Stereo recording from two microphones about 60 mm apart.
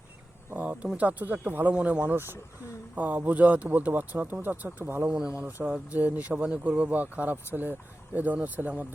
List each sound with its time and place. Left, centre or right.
0.5 s a sound: right
0.9 s speech: right
2.1 s speech: right
2.9 s speech: right
4.8 s speech: right
5.5 s speech: right